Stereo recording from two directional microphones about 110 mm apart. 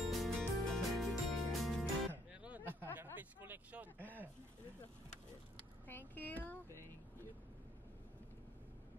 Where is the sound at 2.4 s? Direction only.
15° right (ahead or behind).